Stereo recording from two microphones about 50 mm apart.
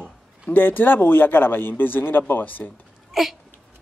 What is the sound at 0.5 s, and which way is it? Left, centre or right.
Speech, left.